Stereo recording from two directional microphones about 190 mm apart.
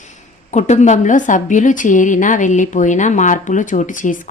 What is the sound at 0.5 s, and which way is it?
A woman's voice, 40° left (ahead or behind).